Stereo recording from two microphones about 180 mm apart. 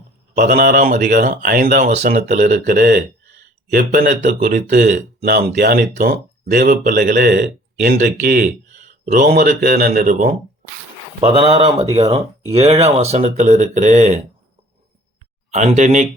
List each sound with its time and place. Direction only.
0.3 s speech: 45° right (ahead or behind)
5.2 s speech: 60° right (ahead or behind)
6.6 s speech: 50° right (ahead or behind)
11.2 s speech: 30° right (ahead or behind)
15.5 s speech: 40° right (ahead or behind)